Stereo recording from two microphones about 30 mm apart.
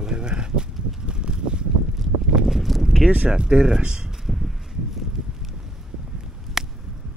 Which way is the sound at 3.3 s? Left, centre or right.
Right.